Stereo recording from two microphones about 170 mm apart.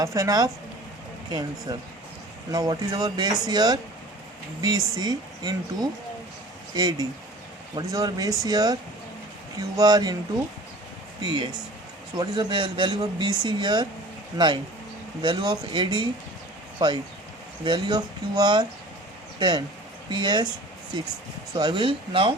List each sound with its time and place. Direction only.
0.0 s speech: 20° right (ahead or behind)
11.2 s speech: 25° right (ahead or behind)
21.5 s speech: 25° right (ahead or behind)